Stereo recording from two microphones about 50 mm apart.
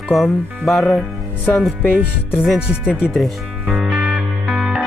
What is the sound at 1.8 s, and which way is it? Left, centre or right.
Music, left.